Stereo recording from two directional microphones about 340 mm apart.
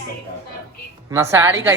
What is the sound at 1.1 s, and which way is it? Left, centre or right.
Speech, centre.